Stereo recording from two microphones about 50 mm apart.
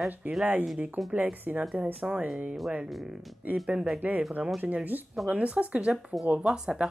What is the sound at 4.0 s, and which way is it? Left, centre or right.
Speech, right.